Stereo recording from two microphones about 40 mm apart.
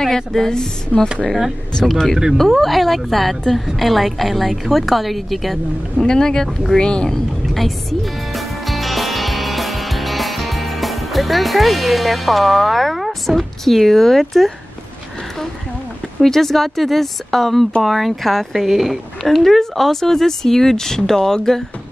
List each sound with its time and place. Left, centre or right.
0.0 s a woman's voice: centre
6.0 s speech: centre
7.5 s music: centre
16.2 s a woman's voice: centre